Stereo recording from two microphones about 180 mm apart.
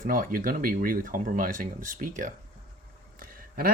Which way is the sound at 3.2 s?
55° right (ahead or behind).